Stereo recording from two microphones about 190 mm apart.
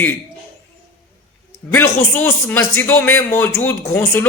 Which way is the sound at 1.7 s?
10° left (ahead or behind).